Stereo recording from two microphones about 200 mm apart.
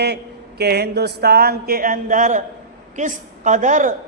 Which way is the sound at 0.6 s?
55° right (ahead or behind).